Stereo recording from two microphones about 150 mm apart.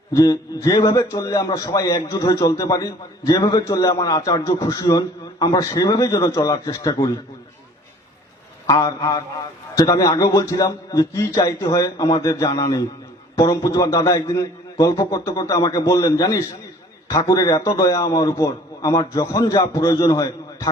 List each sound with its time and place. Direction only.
0.1 s a man's voice: 25° left (ahead or behind)
8.6 s a man's voice: 25° left (ahead or behind)